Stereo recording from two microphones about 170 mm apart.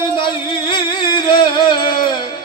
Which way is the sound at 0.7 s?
30° left (ahead or behind).